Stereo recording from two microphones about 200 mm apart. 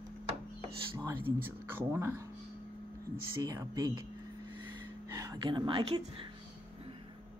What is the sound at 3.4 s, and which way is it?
Speech, 15° right (ahead or behind).